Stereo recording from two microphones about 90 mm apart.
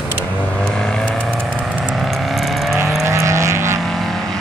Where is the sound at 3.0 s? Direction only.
35° right (ahead or behind).